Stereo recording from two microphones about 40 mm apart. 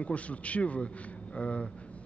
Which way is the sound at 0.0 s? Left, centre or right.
Left.